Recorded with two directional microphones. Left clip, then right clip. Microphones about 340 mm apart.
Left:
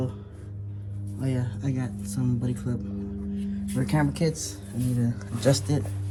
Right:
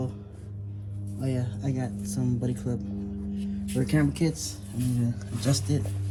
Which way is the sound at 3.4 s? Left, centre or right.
Centre.